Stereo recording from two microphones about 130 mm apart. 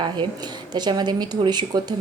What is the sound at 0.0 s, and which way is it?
A woman's voice, 35° right (ahead or behind).